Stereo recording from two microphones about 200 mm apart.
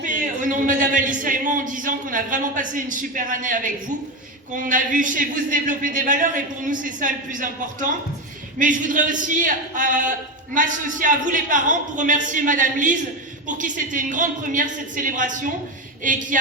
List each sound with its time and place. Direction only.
0.0 s a man's voice: 40° right (ahead or behind)